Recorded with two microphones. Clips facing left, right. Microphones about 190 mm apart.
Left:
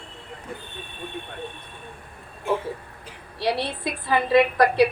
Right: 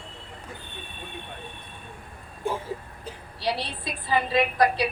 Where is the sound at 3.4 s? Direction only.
60° left (ahead or behind).